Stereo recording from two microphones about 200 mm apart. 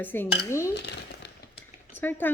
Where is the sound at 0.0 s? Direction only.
10° left (ahead or behind).